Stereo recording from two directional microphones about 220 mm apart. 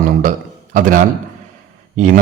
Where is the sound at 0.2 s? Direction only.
35° right (ahead or behind).